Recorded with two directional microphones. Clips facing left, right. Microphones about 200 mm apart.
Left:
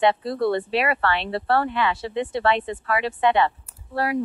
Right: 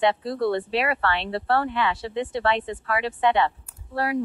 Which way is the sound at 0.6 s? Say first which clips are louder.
Left 2 dB; 80° left.